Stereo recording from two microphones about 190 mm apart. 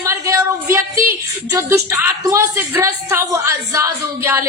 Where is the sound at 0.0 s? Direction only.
15° right (ahead or behind).